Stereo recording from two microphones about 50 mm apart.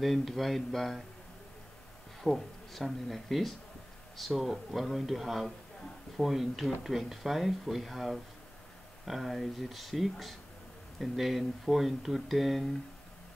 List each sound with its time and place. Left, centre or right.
0.0 s speech: centre
2.2 s speech: centre